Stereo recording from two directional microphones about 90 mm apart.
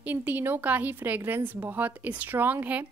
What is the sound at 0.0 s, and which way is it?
Speech, 20° right (ahead or behind).